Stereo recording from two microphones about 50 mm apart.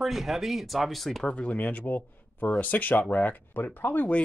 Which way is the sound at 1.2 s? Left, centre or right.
Left.